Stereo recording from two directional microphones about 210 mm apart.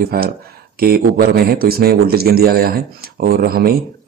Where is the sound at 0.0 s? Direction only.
45° right (ahead or behind).